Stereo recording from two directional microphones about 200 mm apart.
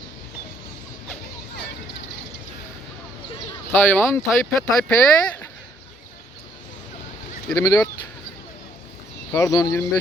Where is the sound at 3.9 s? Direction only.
10° left (ahead or behind).